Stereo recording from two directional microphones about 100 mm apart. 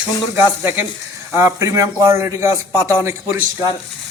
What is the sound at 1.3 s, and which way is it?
A man's voice, 25° right (ahead or behind).